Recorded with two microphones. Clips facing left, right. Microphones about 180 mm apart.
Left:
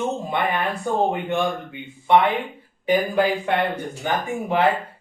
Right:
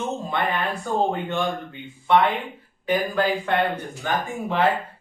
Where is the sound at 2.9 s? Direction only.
15° left (ahead or behind).